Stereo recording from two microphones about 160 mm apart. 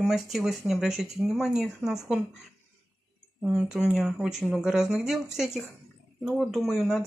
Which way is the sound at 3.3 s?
5° right (ahead or behind).